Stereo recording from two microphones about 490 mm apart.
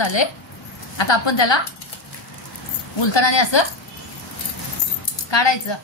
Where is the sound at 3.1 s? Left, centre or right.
Left.